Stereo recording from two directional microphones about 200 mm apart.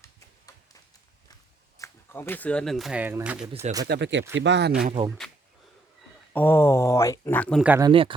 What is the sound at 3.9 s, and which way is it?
Speech, 60° right (ahead or behind).